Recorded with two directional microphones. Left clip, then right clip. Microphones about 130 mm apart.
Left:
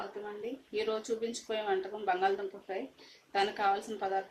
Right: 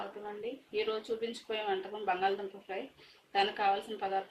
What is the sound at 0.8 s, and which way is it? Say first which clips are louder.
Speech: left 1 dB; 35° left (ahead or behind).